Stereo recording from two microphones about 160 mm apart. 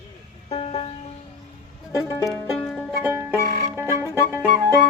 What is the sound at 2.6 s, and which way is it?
Music, 10° left (ahead or behind).